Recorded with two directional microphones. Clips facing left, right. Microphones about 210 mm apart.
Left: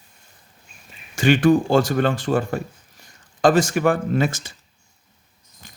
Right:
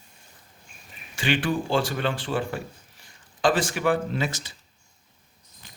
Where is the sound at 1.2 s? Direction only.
45° left (ahead or behind).